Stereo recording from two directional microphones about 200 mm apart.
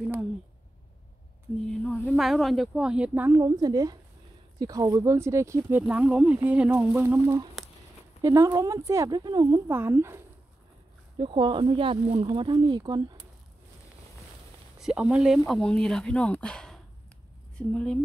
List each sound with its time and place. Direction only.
1.7 s speech: 5° left (ahead or behind); by 10.2 s 15° right (ahead or behind)
11.1 s speech: 25° right (ahead or behind)
14.8 s speech: 5° right (ahead or behind)